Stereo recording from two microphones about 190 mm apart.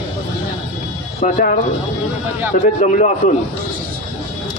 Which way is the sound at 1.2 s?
40° left (ahead or behind).